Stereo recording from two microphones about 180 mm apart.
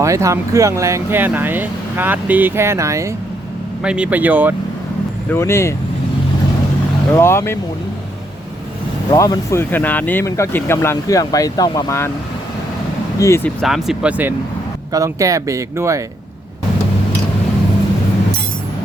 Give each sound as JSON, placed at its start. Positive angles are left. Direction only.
{"t": 0.0, "sound": "speech", "side_deg": -15}
{"t": 3.8, "sound": "speech", "side_deg": -5}
{"t": 5.3, "sound": "speech", "side_deg": 15}
{"t": 7.1, "sound": "speech", "side_deg": 15}
{"t": 9.0, "sound": "speech", "side_deg": 20}
{"t": 13.1, "sound": "speech", "side_deg": 15}
{"t": 13.6, "sound": "speech", "side_deg": 0}